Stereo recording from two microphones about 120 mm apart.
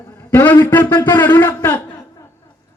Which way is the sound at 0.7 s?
15° left (ahead or behind).